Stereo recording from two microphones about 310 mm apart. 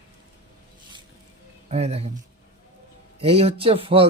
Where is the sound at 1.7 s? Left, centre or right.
Centre.